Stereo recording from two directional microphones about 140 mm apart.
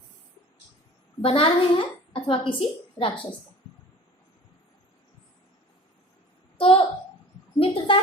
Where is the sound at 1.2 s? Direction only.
40° left (ahead or behind).